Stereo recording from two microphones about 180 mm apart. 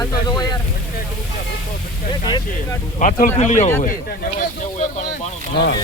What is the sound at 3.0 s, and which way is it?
Speech, 45° left (ahead or behind).